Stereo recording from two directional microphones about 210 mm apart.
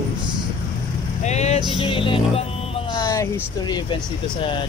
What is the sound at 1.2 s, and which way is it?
Speech, 30° left (ahead or behind).